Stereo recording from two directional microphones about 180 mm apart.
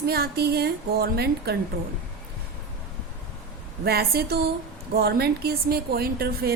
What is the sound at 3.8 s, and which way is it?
A woman's voice, 60° right (ahead or behind).